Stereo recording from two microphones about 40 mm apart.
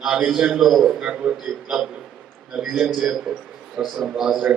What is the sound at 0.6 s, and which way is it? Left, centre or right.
Speech, centre.